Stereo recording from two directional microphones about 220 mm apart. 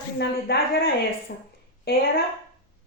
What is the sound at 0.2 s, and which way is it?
A woman's voice, 45° left (ahead or behind).